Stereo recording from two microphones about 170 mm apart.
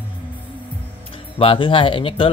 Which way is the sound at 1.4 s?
30° left (ahead or behind).